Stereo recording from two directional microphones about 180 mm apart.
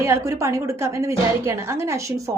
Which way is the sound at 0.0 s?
15° right (ahead or behind).